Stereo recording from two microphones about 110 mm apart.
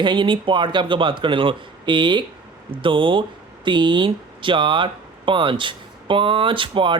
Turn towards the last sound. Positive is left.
turn(degrees=-50)  # may be behind; listen again after turning